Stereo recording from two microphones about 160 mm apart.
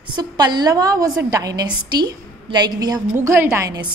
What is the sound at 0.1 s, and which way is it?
A woman's voice, 30° right (ahead or behind).